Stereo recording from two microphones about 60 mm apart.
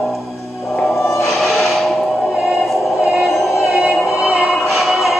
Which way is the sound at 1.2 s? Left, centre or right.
Centre.